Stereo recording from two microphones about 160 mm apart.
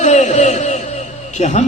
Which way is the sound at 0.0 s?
50° left (ahead or behind).